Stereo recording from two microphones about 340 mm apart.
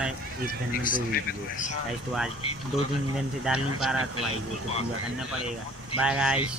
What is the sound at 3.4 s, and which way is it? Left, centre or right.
Speech, centre.